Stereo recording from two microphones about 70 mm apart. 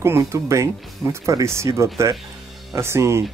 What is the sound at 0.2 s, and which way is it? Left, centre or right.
Speech, right.